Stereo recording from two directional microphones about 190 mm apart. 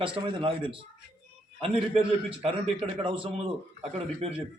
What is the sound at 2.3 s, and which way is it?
A man's voice, 30° right (ahead or behind).